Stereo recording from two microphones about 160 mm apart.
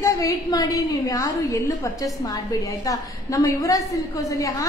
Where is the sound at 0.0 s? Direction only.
20° left (ahead or behind).